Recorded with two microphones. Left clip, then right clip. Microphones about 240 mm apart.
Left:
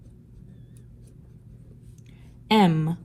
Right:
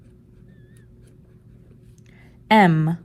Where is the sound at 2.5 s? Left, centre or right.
Right.